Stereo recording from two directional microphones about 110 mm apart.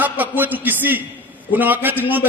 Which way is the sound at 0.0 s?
15° right (ahead or behind).